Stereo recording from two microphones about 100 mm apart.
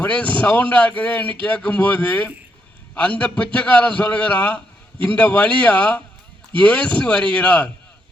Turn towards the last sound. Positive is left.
turn(degrees=10)  # may be behind; listen again after turning